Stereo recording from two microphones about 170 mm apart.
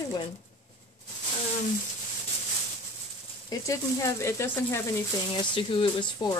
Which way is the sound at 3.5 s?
20° left (ahead or behind).